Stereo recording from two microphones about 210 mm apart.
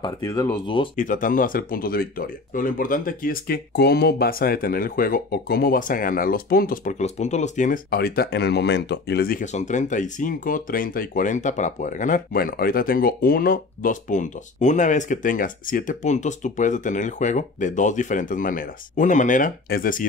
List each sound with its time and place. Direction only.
0.0 s speech: 15° left (ahead or behind)
0.9 s speech: 40° left (ahead or behind)